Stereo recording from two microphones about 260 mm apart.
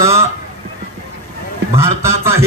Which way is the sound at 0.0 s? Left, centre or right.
Centre.